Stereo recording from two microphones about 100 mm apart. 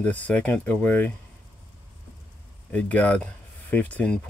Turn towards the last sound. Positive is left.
turn(degrees=10)  # may be behind; listen again after turning